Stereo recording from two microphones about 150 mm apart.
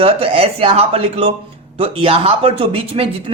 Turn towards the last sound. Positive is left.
turn(degrees=-40)  # may be behind; listen again after turning